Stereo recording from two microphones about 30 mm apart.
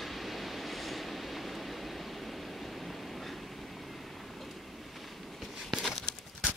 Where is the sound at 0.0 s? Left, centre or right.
Centre.